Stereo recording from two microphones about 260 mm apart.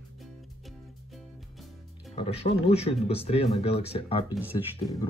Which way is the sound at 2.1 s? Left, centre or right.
Left.